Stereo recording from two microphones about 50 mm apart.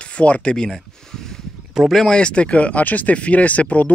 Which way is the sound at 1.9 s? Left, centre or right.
Centre.